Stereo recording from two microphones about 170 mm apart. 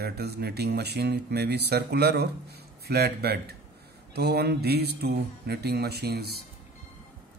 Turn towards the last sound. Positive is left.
turn(degrees=-70)  # may be behind; listen again after turning